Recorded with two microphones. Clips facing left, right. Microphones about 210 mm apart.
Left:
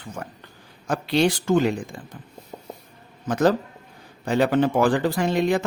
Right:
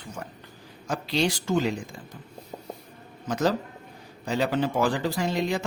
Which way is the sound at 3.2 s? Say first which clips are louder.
Left 5 dB; 55° left (ahead or behind).